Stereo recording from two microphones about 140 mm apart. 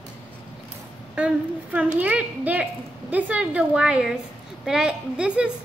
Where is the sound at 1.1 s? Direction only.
10° right (ahead or behind).